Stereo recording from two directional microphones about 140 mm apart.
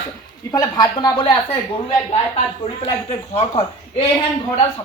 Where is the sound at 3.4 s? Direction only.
45° left (ahead or behind).